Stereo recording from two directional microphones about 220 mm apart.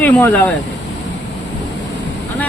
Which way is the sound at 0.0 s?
10° left (ahead or behind).